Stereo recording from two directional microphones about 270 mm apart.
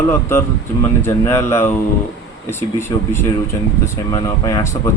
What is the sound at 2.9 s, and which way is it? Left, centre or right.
Speech, centre.